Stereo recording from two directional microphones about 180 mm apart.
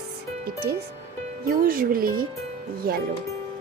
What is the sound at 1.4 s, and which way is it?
Speech, 50° right (ahead or behind).